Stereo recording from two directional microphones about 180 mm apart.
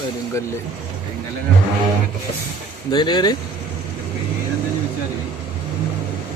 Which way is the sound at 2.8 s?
25° left (ahead or behind).